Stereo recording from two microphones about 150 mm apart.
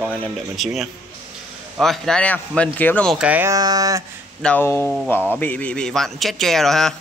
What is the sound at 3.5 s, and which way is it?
Speech, 25° right (ahead or behind).